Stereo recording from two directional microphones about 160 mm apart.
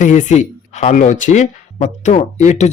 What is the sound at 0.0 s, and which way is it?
Speech, 50° left (ahead or behind).